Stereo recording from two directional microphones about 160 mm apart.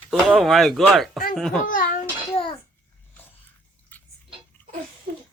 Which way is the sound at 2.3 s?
30° left (ahead or behind).